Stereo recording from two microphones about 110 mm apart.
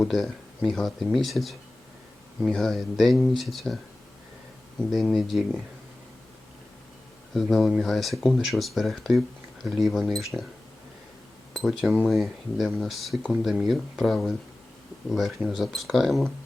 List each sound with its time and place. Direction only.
0.0 s speech: centre (ahead or behind)
4.8 s speech: 5° left (ahead or behind)
7.3 s speech: centre (ahead or behind)
11.5 s speech: 5° right (ahead or behind)